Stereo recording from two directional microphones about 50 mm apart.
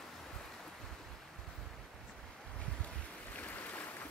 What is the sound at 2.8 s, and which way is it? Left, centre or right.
Boat, left.